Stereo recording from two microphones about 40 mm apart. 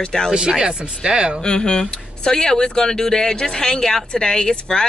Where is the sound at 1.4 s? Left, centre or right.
Left.